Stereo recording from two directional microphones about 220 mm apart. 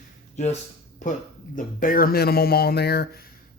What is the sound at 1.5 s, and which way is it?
Speech, 40° left (ahead or behind).